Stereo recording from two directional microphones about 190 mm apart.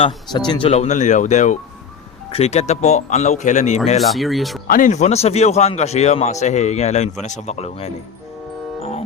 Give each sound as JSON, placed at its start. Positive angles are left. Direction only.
{"t": 0.0, "sound": "a man's voice", "side_deg": 25}
{"t": 4.0, "sound": "speech", "side_deg": 0}
{"t": 4.7, "sound": "a man's voice", "side_deg": 40}
{"t": 8.8, "sound": "music", "side_deg": 35}